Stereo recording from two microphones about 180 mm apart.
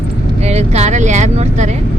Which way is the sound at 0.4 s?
35° right (ahead or behind).